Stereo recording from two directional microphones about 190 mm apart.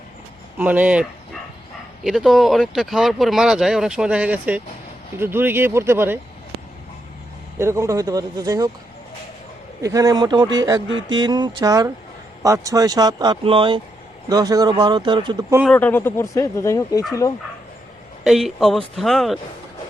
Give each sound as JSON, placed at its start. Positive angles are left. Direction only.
{"t": 0.6, "sound": "speech", "side_deg": -10}
{"t": 2.0, "sound": "speech", "side_deg": 0}
{"t": 7.6, "sound": "speech", "side_deg": -15}
{"t": 9.8, "sound": "speech", "side_deg": -20}
{"t": 15.6, "sound": "speech", "side_deg": 10}
{"t": 18.2, "sound": "speech", "side_deg": 0}